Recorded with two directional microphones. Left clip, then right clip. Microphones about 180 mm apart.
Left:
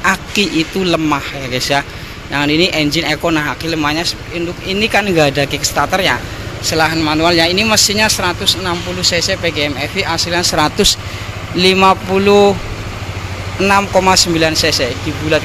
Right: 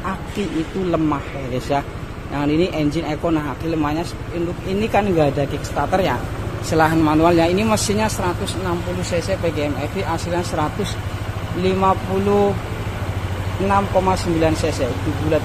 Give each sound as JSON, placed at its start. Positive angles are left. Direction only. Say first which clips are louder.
{"t": 0.0, "sound": "speech", "louder": "left 11 dB", "side_deg": 10}
{"t": 6.7, "sound": "speech", "louder": "left 2 dB", "side_deg": -15}
{"t": 11.6, "sound": "speech", "louder": "left 8 dB", "side_deg": 20}
{"t": 13.7, "sound": "speech", "louder": "left 6 dB", "side_deg": 15}